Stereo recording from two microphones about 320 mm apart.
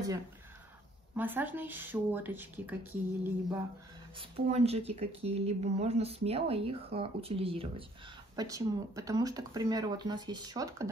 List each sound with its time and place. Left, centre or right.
1.1 s speech: centre
4.2 s speech: centre